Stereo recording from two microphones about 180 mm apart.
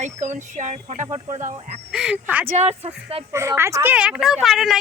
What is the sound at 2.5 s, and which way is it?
Speech, 35° right (ahead or behind).